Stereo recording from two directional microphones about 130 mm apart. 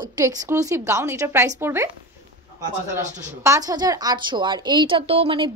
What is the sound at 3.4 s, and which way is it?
A woman's voice, 25° right (ahead or behind).